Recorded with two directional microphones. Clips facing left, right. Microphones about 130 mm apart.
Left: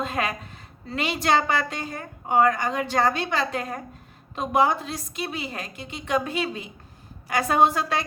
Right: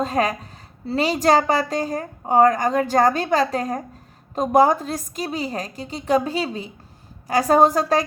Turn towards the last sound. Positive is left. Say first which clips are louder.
# right 5 dB
turn(degrees=-40)  # may be behind; listen again after turning